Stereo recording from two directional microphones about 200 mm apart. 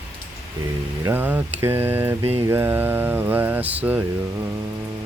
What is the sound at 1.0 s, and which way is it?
Mantra, 10° right (ahead or behind).